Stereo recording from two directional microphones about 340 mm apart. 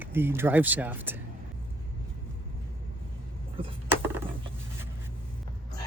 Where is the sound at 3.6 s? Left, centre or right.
Centre.